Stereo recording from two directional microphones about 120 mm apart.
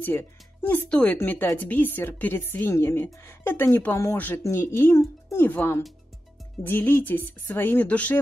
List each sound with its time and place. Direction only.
0.0 s speech: 15° left (ahead or behind)